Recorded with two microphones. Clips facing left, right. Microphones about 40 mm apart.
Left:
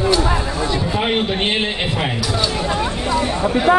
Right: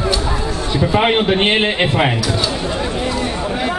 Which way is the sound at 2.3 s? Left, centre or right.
Centre.